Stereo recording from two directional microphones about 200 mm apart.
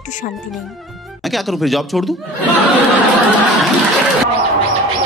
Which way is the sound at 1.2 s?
Centre (ahead or behind).